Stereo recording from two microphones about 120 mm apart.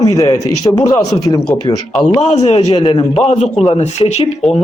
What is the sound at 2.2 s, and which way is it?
Speech, 55° left (ahead or behind).